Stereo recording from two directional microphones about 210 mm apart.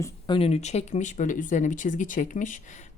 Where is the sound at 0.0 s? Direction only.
25° left (ahead or behind).